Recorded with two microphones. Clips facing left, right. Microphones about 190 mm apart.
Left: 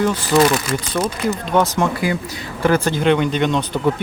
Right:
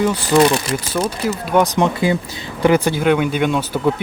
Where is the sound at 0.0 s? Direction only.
10° right (ahead or behind).